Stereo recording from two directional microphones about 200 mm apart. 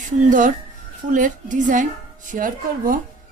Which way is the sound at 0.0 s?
40° right (ahead or behind).